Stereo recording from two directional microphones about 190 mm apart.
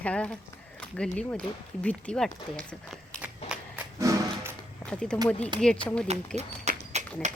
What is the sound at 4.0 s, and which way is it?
Music, 15° right (ahead or behind).